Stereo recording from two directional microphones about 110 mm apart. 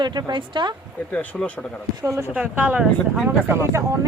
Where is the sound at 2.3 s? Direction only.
15° right (ahead or behind).